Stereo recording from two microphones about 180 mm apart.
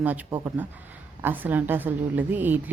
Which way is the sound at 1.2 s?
10° right (ahead or behind).